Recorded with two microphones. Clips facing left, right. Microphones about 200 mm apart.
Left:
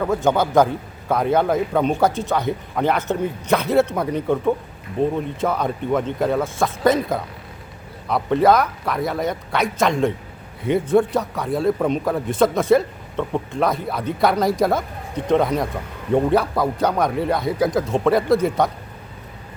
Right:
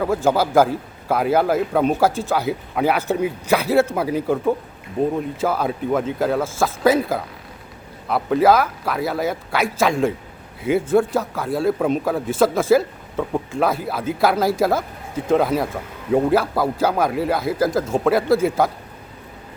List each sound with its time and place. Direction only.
0.3 s a man's voice: 5° right (ahead or behind)